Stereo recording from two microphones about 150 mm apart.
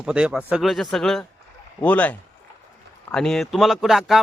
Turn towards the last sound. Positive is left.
turn(degrees=0)  # may be behind; listen again after turning